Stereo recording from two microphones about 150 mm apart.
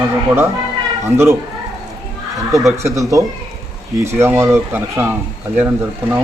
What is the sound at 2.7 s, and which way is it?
Speech, 20° right (ahead or behind).